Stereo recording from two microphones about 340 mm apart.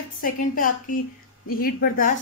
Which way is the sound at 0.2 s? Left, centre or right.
Left.